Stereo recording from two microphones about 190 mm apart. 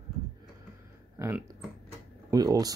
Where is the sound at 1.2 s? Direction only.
10° right (ahead or behind).